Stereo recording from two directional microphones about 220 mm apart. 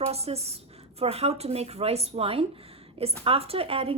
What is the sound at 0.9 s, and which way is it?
Speech, 25° right (ahead or behind).